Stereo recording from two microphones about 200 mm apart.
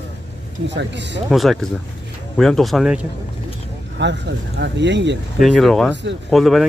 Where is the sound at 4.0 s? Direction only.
60° right (ahead or behind).